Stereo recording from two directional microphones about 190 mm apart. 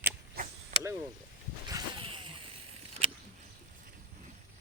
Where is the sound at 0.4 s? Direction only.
50° right (ahead or behind).